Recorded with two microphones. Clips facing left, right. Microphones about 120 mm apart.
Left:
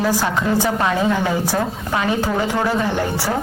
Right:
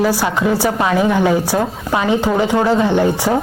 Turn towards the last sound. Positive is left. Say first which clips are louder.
# right 6 dB
turn(degrees=-20)  # may be behind; listen again after turning